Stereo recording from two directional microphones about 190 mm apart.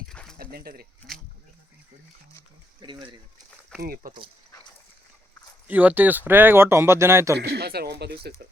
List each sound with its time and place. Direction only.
0.1 s a sound: 5° left (ahead or behind)
0.5 s speech: 55° right (ahead or behind)
2.8 s speech: 25° right (ahead or behind)
3.8 s speech: 50° right (ahead or behind)
5.6 s speech: 10° right (ahead or behind)
7.3 s speech: 60° right (ahead or behind)